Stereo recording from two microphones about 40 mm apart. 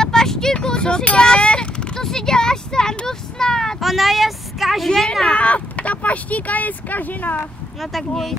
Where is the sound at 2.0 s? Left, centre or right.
Centre.